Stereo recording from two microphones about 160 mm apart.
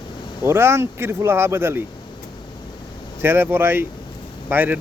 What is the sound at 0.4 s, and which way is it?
Speech, 15° right (ahead or behind).